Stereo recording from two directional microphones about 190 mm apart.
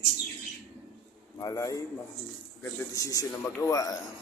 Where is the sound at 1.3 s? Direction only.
15° left (ahead or behind).